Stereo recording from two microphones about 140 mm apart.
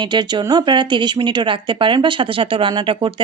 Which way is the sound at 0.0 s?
30° right (ahead or behind).